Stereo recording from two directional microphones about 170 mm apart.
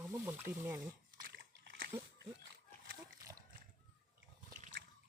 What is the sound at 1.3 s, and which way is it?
Splash, 65° right (ahead or behind).